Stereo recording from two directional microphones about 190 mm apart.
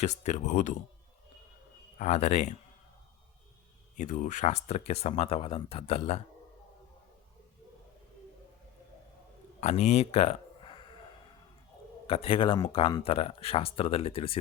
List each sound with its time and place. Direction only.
0.0 s speech: 40° left (ahead or behind)
2.0 s speech: 40° left (ahead or behind)
3.9 s speech: 40° left (ahead or behind)
9.6 s a sound: 35° left (ahead or behind)
12.0 s speech: 30° left (ahead or behind)